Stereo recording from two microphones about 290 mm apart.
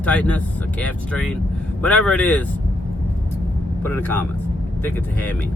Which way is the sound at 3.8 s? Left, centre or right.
Centre.